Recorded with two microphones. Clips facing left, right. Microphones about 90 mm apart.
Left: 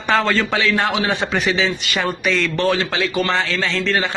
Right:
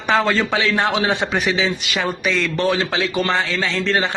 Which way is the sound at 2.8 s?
25° right (ahead or behind).